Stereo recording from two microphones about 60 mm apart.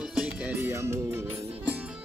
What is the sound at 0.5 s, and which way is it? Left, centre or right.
Speech, right.